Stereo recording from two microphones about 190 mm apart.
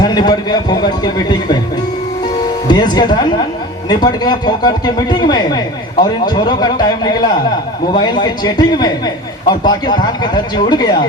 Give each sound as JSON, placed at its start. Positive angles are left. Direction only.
{"t": 0.0, "sound": "a man's voice", "side_deg": 20}
{"t": 2.6, "sound": "a man's voice", "side_deg": 20}